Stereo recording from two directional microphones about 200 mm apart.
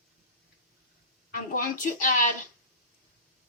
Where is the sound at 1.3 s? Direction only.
45° left (ahead or behind).